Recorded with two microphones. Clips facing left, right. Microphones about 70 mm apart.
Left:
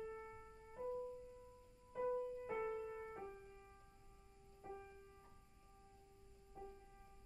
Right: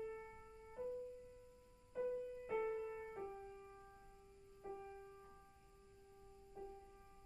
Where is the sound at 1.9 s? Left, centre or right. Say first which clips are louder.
Left 1 dB; centre.